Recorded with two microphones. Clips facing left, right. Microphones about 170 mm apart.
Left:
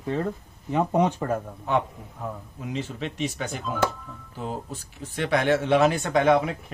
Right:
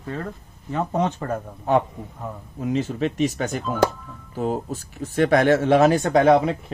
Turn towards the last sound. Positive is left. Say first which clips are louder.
# right 4 dB
turn(degrees=-35)  # may be behind; listen again after turning